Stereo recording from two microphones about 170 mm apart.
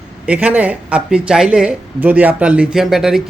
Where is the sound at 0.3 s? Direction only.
10° right (ahead or behind).